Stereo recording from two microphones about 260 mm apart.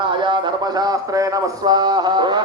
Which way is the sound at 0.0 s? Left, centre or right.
Centre.